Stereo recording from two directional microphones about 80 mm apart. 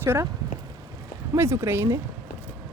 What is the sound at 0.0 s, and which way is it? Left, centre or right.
Speech, right.